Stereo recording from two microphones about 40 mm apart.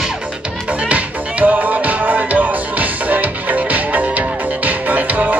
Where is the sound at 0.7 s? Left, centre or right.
Right.